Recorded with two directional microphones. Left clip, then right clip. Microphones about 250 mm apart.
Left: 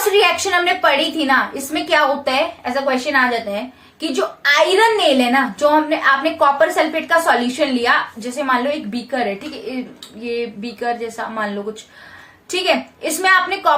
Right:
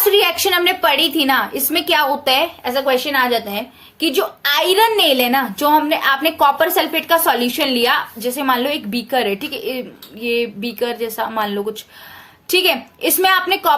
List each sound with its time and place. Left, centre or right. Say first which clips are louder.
0.1 s a woman's voice: even; right
10.2 s a woman's voice: right 4 dB; right